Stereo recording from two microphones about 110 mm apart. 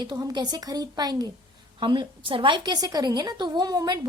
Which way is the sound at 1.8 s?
45° right (ahead or behind).